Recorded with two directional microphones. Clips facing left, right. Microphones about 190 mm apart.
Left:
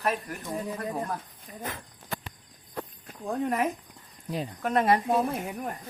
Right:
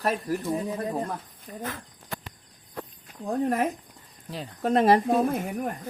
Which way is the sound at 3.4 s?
40° right (ahead or behind).